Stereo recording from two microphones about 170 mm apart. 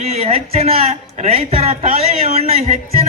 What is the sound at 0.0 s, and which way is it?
A man's voice, 40° right (ahead or behind).